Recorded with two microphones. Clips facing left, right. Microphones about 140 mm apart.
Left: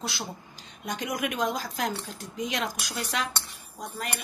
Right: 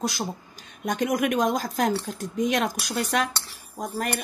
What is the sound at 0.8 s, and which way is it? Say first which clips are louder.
A woman's voice: right 7 dB; 50° right (ahead or behind).